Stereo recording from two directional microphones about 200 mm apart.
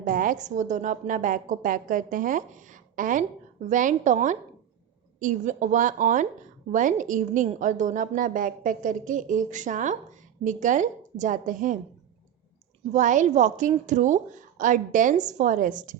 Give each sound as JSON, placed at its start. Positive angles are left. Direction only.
{"t": 0.1, "sound": "a woman's voice", "side_deg": -40}
{"t": 12.9, "sound": "a woman's voice", "side_deg": -40}